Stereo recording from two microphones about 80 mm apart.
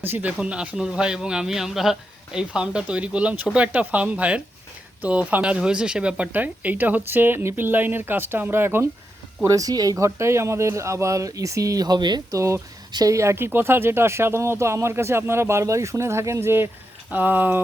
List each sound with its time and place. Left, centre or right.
0.0 s a man's voice: right
9.5 s speech: right
12.3 s speech: right